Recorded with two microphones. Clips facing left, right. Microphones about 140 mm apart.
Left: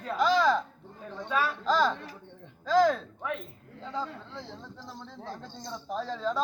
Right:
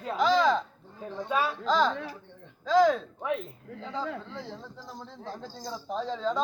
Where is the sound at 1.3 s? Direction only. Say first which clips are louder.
Right 1 dB; 20° right (ahead or behind).